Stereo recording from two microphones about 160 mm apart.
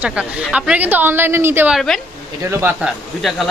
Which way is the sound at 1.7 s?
Centre (ahead or behind).